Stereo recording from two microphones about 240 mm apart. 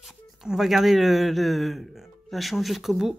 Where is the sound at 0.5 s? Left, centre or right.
Centre.